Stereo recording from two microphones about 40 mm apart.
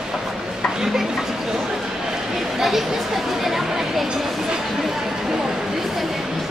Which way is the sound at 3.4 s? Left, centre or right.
Centre.